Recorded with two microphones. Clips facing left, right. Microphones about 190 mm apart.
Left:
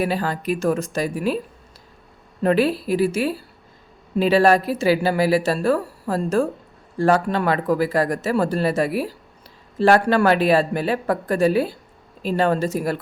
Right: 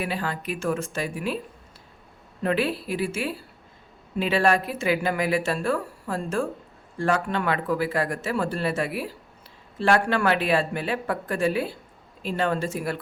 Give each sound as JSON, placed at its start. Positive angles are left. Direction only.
{"t": 0.0, "sound": "speech", "side_deg": 40}
{"t": 2.4, "sound": "speech", "side_deg": 40}